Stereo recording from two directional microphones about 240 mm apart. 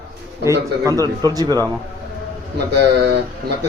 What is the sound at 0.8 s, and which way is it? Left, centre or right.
Speech, centre.